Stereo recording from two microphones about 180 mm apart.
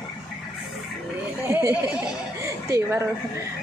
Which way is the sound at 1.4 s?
15° right (ahead or behind).